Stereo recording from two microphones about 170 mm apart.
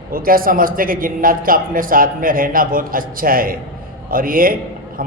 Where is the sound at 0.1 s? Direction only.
55° right (ahead or behind).